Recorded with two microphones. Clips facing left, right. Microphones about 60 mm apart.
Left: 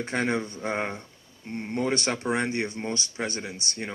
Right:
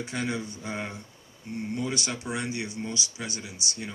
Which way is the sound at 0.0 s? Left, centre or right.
Left.